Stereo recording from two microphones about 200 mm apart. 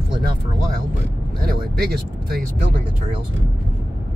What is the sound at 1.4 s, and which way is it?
Speech, 50° right (ahead or behind).